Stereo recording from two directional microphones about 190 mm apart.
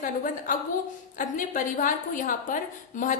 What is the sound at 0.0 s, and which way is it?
A woman's voice, 45° left (ahead or behind).